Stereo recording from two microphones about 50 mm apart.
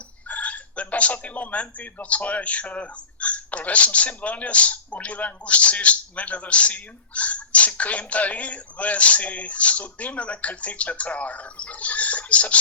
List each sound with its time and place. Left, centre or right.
0.3 s chicken: left
1.8 s speech: left